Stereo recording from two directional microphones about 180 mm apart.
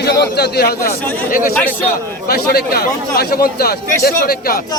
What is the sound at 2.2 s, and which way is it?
A man's voice, 60° left (ahead or behind).